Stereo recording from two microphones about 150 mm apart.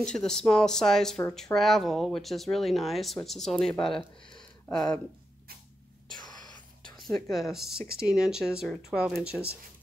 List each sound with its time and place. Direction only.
0.0 s speech: 5° left (ahead or behind)
4.4 s a sound: 5° left (ahead or behind)
6.1 s whispering: 30° left (ahead or behind)
7.0 s speech: centre (ahead or behind)